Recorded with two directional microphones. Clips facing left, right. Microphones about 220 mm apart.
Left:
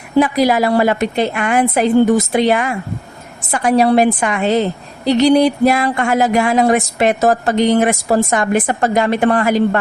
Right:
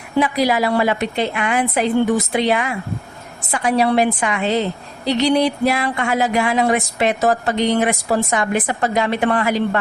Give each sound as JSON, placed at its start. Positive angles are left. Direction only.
{"t": 0.2, "sound": "speech", "side_deg": 45}